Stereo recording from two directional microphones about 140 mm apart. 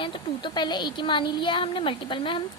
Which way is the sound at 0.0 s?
35° left (ahead or behind).